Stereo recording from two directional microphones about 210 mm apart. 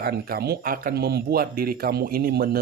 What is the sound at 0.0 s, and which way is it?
Speech, 45° right (ahead or behind).